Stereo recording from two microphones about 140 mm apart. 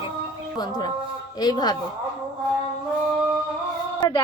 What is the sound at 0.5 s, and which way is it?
A woman's voice, 30° left (ahead or behind).